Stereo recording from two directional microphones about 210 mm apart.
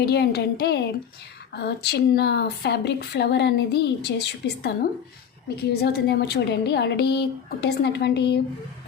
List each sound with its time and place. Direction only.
0.0 s speech: 50° left (ahead or behind)